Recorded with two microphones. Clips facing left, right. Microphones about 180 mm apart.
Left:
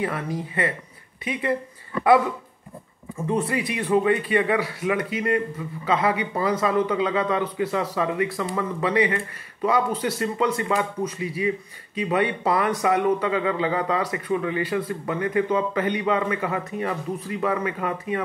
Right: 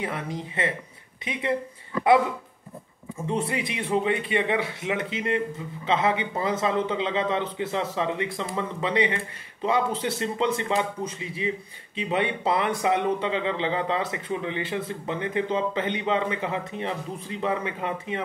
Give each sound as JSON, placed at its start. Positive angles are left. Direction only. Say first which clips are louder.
{"t": 0.0, "sound": "speech", "louder": "left 4 dB", "side_deg": -20}
{"t": 3.3, "sound": "speech", "louder": "left 3 dB", "side_deg": -25}